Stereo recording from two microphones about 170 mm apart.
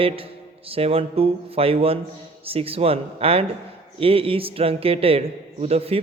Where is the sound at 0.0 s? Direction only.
35° right (ahead or behind).